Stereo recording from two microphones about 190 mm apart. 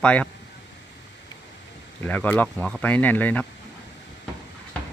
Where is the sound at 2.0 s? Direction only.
10° left (ahead or behind).